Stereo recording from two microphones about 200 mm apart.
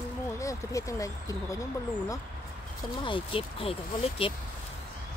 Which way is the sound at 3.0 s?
25° left (ahead or behind).